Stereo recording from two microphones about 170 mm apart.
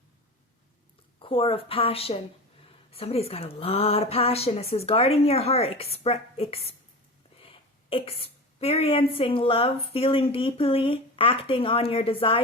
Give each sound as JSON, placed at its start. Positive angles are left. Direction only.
{"t": 1.2, "sound": "a woman's voice", "side_deg": 30}